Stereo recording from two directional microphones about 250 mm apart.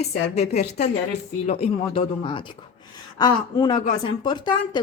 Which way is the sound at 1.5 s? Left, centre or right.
Left.